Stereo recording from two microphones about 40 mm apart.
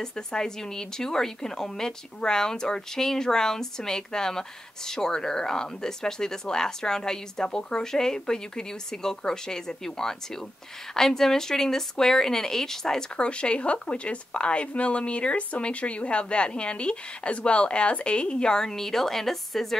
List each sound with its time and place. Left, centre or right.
0.0 s a woman's voice: centre
13.2 s speech: left; by 19.8 s centre